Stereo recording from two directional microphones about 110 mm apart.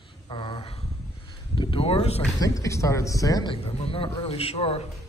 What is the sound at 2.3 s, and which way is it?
A man's voice, 30° left (ahead or behind).